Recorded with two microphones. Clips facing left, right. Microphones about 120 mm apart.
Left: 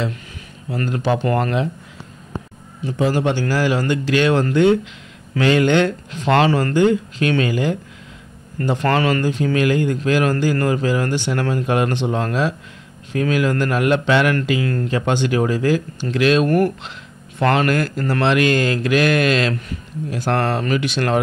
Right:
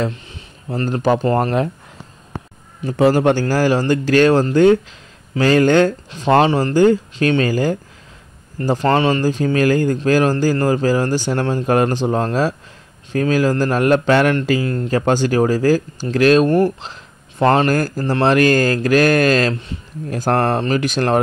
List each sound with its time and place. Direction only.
0.7 s speech: 40° right (ahead or behind)
1.2 s speech: 25° right (ahead or behind)
3.0 s speech: 50° right (ahead or behind)
6.2 s speech: 25° right (ahead or behind)
8.8 s speech: 25° right (ahead or behind)
9.3 s speech: 35° right (ahead or behind)
14.6 s speech: 25° right (ahead or behind)
14.9 s speech: 40° right (ahead or behind)
16.4 s speech: 25° right (ahead or behind); by 21.2 s 40° right (ahead or behind)